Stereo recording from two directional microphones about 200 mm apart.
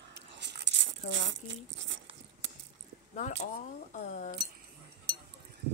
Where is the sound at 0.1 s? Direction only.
60° right (ahead or behind).